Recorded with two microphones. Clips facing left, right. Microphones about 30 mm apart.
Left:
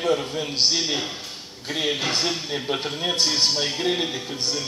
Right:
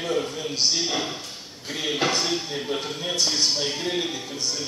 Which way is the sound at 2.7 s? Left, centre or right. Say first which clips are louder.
Left 3 dB; left.